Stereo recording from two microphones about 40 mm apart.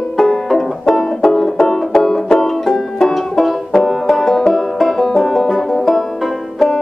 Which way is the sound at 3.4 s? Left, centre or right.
Centre.